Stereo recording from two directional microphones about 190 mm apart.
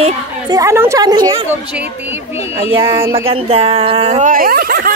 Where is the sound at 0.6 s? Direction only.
15° right (ahead or behind).